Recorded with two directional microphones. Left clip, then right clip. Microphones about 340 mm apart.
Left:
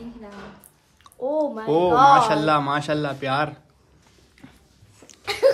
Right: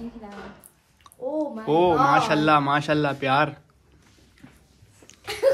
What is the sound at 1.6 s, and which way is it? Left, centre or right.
A man's voice, centre.